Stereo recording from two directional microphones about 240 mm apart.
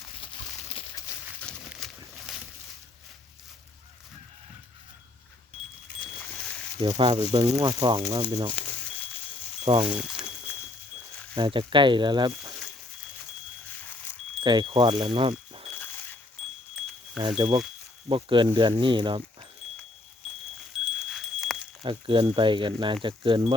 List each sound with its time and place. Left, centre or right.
0.7 s horse: left
1.4 s horse: centre
6.8 s speech: right
9.8 s speech: centre
11.3 s speech: centre
14.4 s speech: centre
17.2 s speech: right
20.8 s wind chime: centre
21.8 s speech: right